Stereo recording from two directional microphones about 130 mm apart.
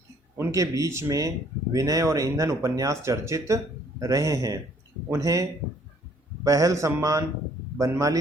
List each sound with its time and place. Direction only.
0.3 s speech: 20° right (ahead or behind)